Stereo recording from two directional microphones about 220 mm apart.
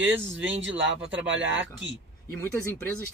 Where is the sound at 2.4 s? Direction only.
10° left (ahead or behind).